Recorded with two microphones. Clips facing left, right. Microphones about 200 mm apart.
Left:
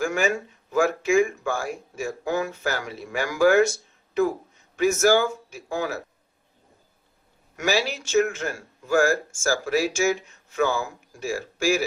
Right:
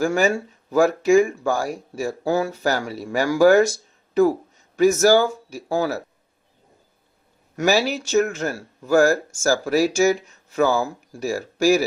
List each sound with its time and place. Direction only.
0.0 s speech: 35° right (ahead or behind)
7.5 s speech: 40° right (ahead or behind)